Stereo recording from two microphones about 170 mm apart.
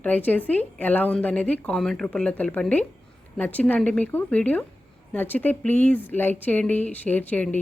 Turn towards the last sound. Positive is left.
turn(degrees=10)  # may be behind; listen again after turning